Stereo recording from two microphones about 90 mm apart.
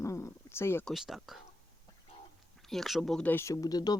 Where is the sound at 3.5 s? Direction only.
45° left (ahead or behind).